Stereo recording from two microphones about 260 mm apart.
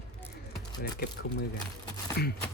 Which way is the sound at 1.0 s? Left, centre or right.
Left.